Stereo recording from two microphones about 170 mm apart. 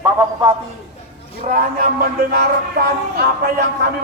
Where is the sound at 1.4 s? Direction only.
55° right (ahead or behind).